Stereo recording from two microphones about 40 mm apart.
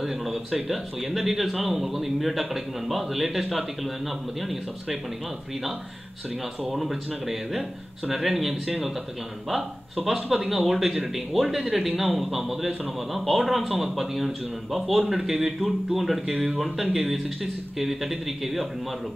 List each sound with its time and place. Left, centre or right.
0.0 s a man's voice: centre
6.7 s a man's voice: centre
10.0 s a man's voice: centre
15.4 s speech: centre
16.0 s a man's voice: centre